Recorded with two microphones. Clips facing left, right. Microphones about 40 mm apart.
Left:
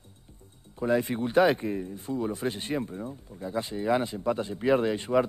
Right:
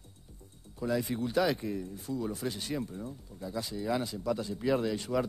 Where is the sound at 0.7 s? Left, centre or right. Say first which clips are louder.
Left 5 dB; left.